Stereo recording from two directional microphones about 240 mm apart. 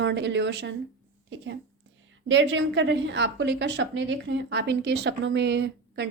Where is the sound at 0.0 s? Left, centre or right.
Right.